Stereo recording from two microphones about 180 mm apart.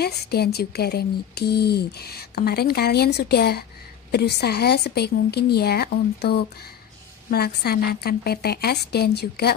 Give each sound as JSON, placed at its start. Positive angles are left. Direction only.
{"t": 0.0, "sound": "speech", "side_deg": 60}